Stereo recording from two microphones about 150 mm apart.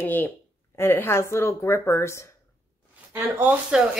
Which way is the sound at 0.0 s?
10° left (ahead or behind).